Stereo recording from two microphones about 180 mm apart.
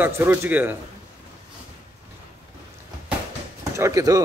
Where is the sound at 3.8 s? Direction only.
20° right (ahead or behind).